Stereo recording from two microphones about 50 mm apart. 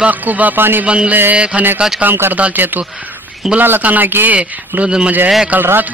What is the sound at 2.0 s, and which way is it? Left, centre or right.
Speech, right.